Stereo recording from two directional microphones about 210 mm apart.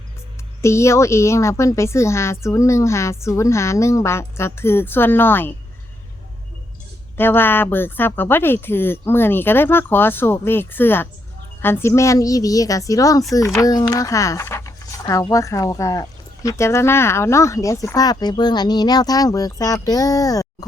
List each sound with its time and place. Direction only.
0.6 s speech: 15° left (ahead or behind)
7.2 s speech: 10° left (ahead or behind)